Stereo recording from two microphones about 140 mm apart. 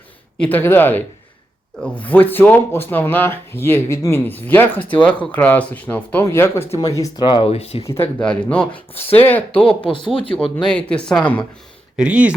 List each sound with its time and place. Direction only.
0.3 s speech: 10° left (ahead or behind); by 7.9 s 45° left (ahead or behind)
7.9 s speech: 15° left (ahead or behind)
8.7 s speech: 45° left (ahead or behind)
9.2 s speech: 10° left (ahead or behind)
11.9 s speech: 10° right (ahead or behind)